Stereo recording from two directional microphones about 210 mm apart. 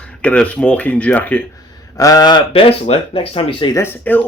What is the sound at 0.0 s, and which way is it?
Speech, 5° left (ahead or behind).